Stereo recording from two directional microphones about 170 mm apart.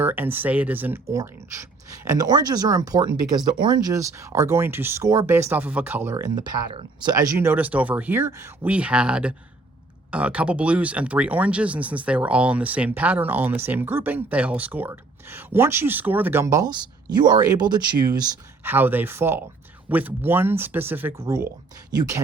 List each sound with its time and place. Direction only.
0.0 s speech: 10° right (ahead or behind)
18.6 s speech: 10° right (ahead or behind)